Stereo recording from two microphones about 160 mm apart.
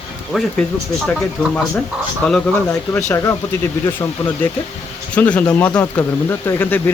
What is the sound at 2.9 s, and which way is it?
Speech, 20° left (ahead or behind).